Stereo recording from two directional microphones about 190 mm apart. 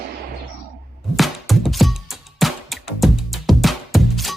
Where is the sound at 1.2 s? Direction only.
Centre (ahead or behind).